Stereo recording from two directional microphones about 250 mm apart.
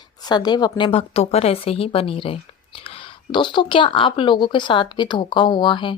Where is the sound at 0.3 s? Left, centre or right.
Centre.